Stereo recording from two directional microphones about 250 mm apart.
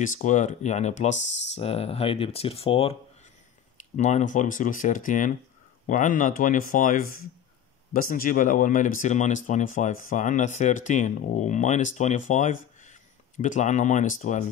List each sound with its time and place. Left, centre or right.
0.0 s speech: left